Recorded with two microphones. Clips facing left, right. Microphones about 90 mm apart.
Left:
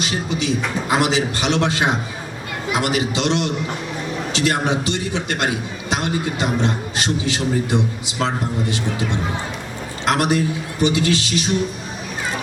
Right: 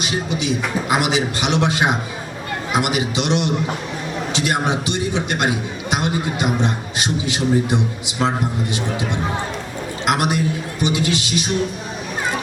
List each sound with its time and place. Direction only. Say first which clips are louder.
0.0 s a man's voice: even; 15° right (ahead or behind)
10.1 s a man's voice: left 1 dB; 15° right (ahead or behind)